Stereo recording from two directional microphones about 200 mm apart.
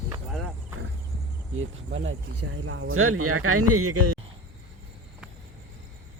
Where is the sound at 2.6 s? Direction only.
90° right.